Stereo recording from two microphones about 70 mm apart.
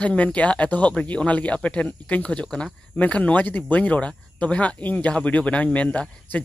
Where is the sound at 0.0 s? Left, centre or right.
Centre.